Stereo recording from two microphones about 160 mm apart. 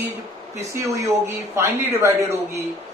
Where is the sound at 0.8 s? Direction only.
15° right (ahead or behind).